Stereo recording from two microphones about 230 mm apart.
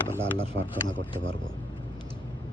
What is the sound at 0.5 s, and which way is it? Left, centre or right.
Speech, right.